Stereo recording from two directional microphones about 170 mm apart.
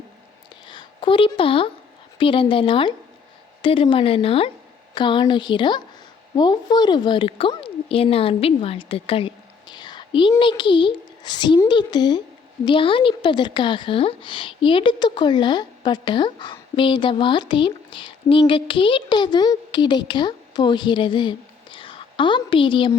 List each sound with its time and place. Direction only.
0.7 s a woman's voice: 30° left (ahead or behind)